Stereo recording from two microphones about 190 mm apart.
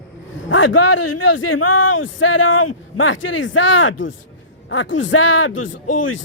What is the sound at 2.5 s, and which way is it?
Speech, 90° left.